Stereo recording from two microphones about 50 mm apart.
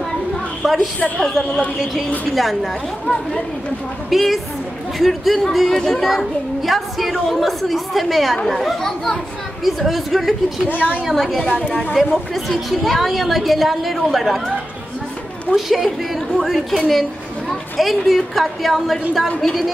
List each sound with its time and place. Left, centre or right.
0.7 s speech: left
1.2 s a woman's voice: centre
3.1 s a child's voice: centre
4.1 s a woman's voice: centre
6.0 s a woman's voice: centre
10.7 s a woman's voice: left
11.1 s a woman's voice: centre
15.5 s a woman's voice: centre